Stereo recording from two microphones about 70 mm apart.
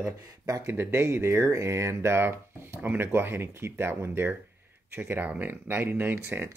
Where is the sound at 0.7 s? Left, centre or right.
Right.